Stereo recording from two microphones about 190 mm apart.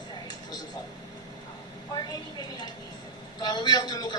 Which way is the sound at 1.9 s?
20° left (ahead or behind).